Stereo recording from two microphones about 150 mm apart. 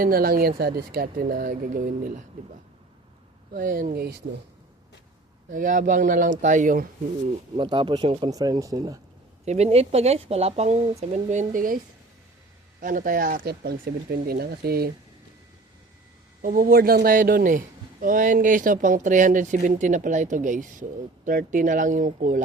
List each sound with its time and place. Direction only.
0.0 s speech: 80° right; by 2.2 s 65° right (ahead or behind)
3.5 s speech: 65° right (ahead or behind)
5.5 s speech: 65° right (ahead or behind)
7.5 s speech: 35° right (ahead or behind)
8.3 s speech: 25° right (ahead or behind)
9.5 s speech: 45° right (ahead or behind); by 11.8 s 65° right (ahead or behind)
12.8 s speech: 65° right (ahead or behind); by 14.8 s 90° right
16.4 s speech: 70° right (ahead or behind)